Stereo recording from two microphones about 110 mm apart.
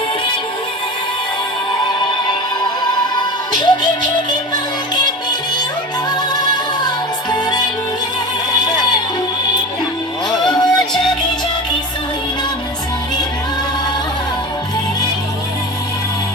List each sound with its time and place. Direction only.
3.2 s music: 45° left (ahead or behind)
6.1 s music: 40° left (ahead or behind)
10.5 s music: 40° left (ahead or behind)